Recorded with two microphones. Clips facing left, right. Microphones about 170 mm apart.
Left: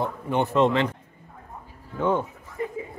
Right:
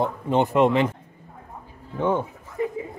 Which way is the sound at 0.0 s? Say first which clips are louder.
Right 3 dB; 20° right (ahead or behind).